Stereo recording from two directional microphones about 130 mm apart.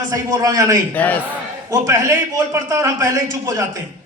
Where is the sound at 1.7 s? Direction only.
25° right (ahead or behind).